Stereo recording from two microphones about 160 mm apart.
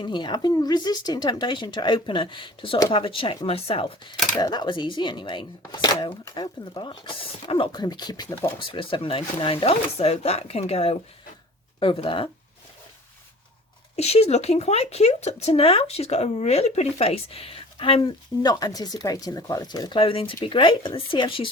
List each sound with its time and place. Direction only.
0.0 s speech: 25° left (ahead or behind)
13.9 s speech: 40° left (ahead or behind)
18.6 s speech: 25° left (ahead or behind)